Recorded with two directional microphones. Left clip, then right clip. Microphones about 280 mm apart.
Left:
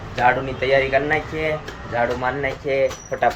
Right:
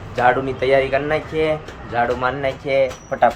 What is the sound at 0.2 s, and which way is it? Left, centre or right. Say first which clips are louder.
Speech: right 2 dB; centre.